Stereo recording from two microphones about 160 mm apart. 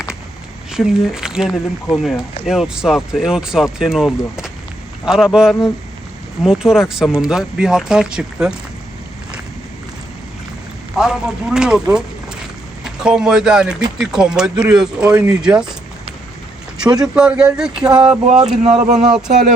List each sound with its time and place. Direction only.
0.7 s speech: 5° right (ahead or behind)
10.9 s speech: 5° right (ahead or behind)
17.2 s speech: 5° right (ahead or behind)
17.7 s a sound: 30° right (ahead or behind)
18.7 s speech: 5° right (ahead or behind)